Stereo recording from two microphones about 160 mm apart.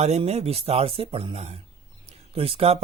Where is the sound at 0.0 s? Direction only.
40° right (ahead or behind).